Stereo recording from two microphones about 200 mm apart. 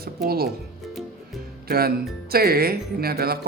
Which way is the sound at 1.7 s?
50° right (ahead or behind).